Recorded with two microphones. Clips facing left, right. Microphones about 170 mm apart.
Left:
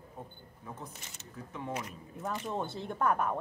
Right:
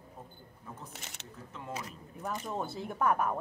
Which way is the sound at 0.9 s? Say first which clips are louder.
Right 3 dB; 70° right (ahead or behind).